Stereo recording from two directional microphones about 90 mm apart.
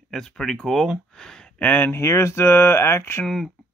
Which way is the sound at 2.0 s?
30° left (ahead or behind).